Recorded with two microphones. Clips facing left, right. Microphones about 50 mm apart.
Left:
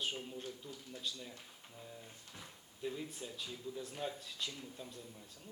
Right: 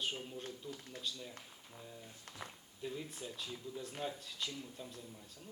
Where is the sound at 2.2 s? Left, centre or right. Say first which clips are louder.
Right 5 dB; right.